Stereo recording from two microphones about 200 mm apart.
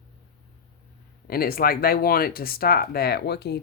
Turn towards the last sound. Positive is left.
turn(degrees=55)  # may be behind; listen again after turning